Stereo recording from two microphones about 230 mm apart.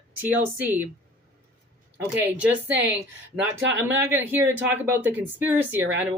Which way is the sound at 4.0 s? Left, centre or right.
Centre.